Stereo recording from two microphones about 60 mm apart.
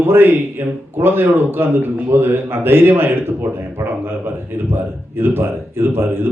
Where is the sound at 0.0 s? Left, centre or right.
Right.